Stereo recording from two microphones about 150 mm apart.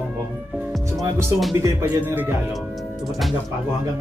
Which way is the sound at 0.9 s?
20° right (ahead or behind).